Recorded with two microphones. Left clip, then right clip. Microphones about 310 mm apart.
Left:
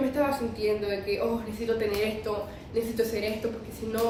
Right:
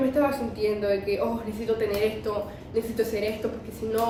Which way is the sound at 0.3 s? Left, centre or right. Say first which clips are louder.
Right 1 dB; centre.